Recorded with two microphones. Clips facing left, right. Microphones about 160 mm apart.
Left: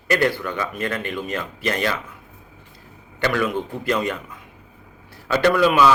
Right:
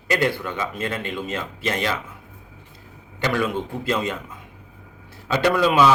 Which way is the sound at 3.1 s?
20° right (ahead or behind).